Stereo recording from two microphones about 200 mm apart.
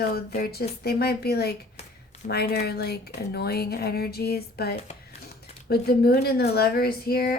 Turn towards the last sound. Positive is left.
turn(degrees=50)  # may be behind; listen again after turning